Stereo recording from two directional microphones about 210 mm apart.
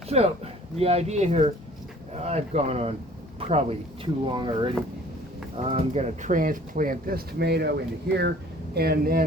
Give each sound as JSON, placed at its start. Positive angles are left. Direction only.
{"t": 0.1, "sound": "speech", "side_deg": -30}